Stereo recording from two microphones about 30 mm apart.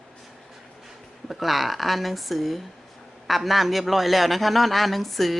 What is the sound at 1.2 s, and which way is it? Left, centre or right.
A man's voice, centre.